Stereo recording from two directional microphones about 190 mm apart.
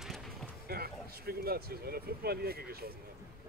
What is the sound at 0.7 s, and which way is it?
Speech, 55° right (ahead or behind).